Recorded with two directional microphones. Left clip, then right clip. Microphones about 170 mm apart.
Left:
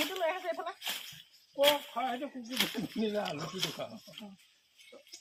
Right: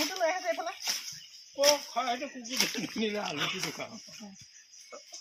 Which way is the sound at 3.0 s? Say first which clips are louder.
Even; 65° left (ahead or behind).